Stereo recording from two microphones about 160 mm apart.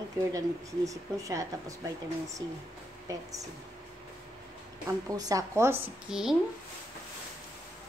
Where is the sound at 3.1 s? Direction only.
20° right (ahead or behind).